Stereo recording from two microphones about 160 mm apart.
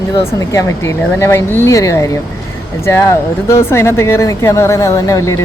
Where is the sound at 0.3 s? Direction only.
20° left (ahead or behind).